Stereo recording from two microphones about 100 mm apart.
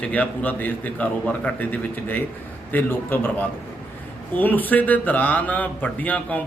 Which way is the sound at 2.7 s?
20° left (ahead or behind).